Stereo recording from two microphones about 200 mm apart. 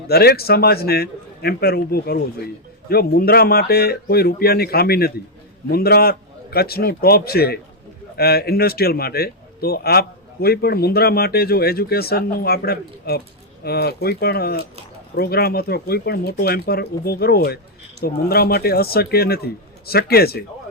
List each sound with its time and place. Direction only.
0.1 s speech: 50° left (ahead or behind)